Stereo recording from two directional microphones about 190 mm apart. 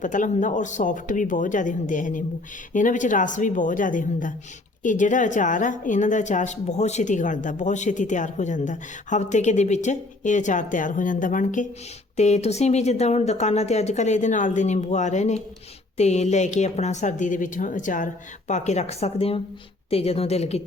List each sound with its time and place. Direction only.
0.0 s a woman's voice: 40° left (ahead or behind)